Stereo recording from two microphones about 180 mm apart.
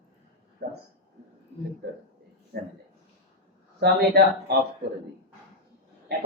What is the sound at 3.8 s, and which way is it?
Speech, 65° right (ahead or behind).